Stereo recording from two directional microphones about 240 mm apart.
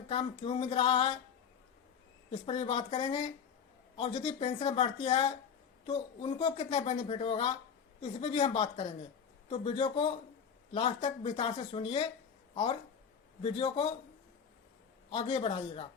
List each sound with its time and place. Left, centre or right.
0.1 s speech: left
2.3 s speech: left
13.4 s speech: left
15.1 s speech: left